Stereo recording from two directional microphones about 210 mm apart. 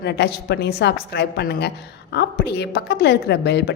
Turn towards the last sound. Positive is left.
turn(degrees=55)  # may be behind; listen again after turning